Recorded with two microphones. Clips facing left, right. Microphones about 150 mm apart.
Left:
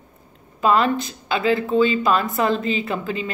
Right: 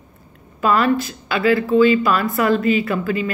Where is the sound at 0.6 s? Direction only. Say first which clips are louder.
Right 1 dB; 20° left (ahead or behind).